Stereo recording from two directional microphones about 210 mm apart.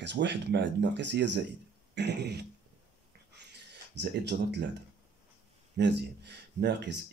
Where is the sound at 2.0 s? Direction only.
55° right (ahead or behind).